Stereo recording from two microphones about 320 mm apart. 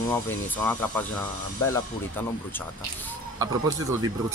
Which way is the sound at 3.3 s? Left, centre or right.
Centre.